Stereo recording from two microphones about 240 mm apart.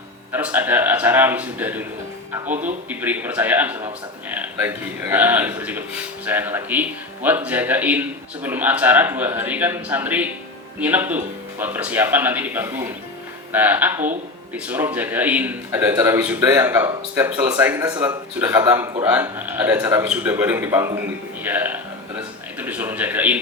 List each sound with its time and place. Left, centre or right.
0.3 s speech: centre